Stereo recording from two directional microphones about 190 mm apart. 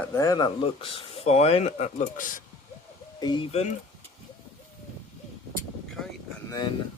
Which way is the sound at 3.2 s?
25° left (ahead or behind).